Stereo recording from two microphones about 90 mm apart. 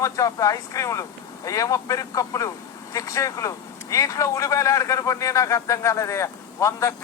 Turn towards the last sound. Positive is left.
turn(degrees=35)  # may be behind; listen again after turning